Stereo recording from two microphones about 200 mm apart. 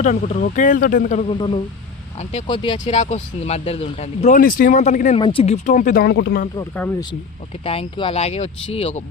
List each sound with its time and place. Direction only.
0.0 s speech: 40° left (ahead or behind)
2.8 s speech: 35° left (ahead or behind); by 6.4 s 55° left (ahead or behind)
6.6 s speech: 10° left (ahead or behind)
7.6 s speech: 30° left (ahead or behind)